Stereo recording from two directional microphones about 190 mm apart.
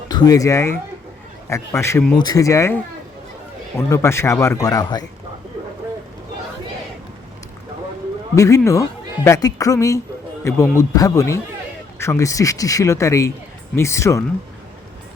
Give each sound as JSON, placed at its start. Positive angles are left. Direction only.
{"t": 0.1, "sound": "a man's voice", "side_deg": 20}
{"t": 8.4, "sound": "a man's voice", "side_deg": 15}